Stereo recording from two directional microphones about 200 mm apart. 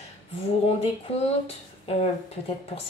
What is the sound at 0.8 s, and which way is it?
Speech, 30° left (ahead or behind).